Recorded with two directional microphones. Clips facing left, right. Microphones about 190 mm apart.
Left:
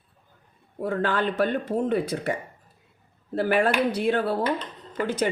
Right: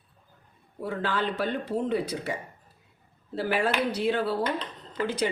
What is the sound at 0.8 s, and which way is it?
Speech, 50° left (ahead or behind).